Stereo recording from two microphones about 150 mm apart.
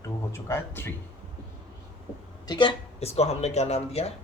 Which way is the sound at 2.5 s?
35° left (ahead or behind).